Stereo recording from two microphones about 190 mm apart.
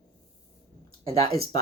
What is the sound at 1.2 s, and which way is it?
Speech, 20° left (ahead or behind).